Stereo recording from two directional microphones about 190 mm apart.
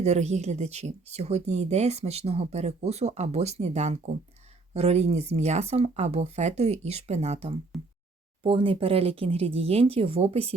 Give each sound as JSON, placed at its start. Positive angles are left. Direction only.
{"t": 0.0, "sound": "speech", "side_deg": -35}